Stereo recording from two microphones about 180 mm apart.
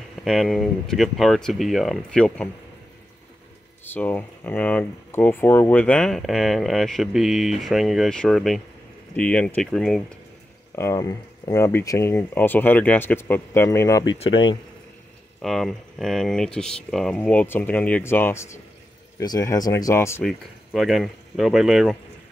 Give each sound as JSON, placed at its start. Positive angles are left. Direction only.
{"t": 0.2, "sound": "speech", "side_deg": 0}
{"t": 3.8, "sound": "speech", "side_deg": 10}
{"t": 10.8, "sound": "speech", "side_deg": 20}
{"t": 14.1, "sound": "speech", "side_deg": 30}
{"t": 15.4, "sound": "speech", "side_deg": 0}
{"t": 20.2, "sound": "speech", "side_deg": 0}